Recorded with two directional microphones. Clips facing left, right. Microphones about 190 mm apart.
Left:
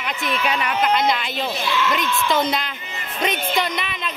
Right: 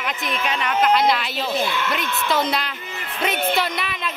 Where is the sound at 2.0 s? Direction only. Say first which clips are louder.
Left 3 dB; 65° right (ahead or behind).